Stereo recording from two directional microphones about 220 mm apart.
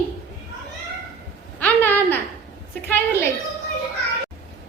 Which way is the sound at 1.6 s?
10° left (ahead or behind).